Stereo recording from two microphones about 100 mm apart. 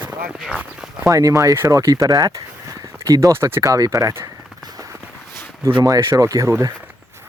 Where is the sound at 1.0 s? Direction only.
35° right (ahead or behind).